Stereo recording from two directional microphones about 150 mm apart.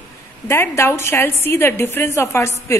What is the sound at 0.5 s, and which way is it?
A woman's voice, 15° left (ahead or behind).